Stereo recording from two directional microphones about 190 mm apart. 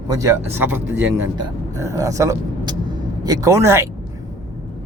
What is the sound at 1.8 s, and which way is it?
Speech, 15° right (ahead or behind).